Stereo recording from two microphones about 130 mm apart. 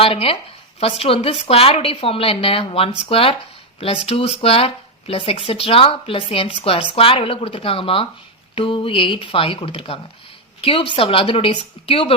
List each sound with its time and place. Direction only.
0.0 s a woman's voice: 45° left (ahead or behind)